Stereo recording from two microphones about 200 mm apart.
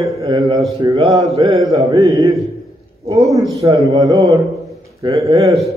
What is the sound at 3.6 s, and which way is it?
A man's voice, 20° right (ahead or behind).